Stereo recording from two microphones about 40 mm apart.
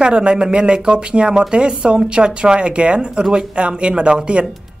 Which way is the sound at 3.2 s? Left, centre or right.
Centre.